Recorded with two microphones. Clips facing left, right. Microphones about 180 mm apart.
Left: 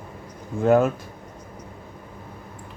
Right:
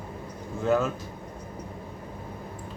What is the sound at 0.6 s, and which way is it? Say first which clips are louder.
Speech: left 7 dB; 55° left (ahead or behind).